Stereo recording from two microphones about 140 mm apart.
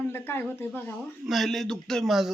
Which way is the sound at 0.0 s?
15° left (ahead or behind).